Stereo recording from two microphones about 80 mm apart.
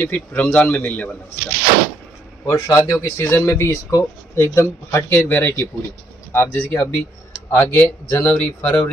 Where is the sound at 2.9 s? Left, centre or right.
Left.